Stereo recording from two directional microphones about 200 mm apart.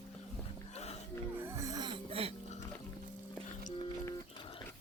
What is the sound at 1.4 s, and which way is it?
Music, 15° right (ahead or behind).